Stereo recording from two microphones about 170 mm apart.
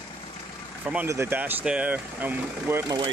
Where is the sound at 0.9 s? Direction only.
10° right (ahead or behind).